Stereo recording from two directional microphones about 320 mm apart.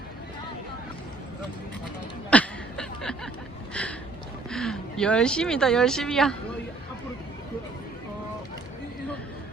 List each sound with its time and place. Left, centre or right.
2.3 s chuckle: centre
3.8 s a sound: centre
4.5 s speech: centre